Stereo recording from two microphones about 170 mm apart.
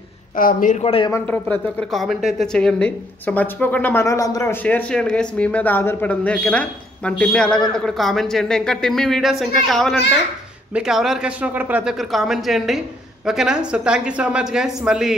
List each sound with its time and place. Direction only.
0.4 s speech: 55° left (ahead or behind)
0.8 s speech: 30° left (ahead or behind)
1.1 s speech: 10° left (ahead or behind)